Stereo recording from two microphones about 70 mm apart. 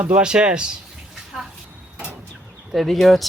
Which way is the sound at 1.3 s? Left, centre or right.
Centre.